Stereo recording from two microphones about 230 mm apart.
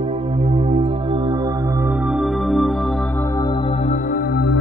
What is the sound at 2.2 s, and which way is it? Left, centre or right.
Music, centre.